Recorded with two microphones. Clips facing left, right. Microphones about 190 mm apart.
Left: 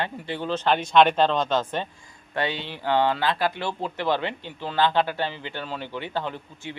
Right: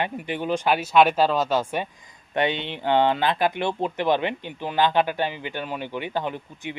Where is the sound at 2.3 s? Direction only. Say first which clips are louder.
Right 4 dB; 20° right (ahead or behind).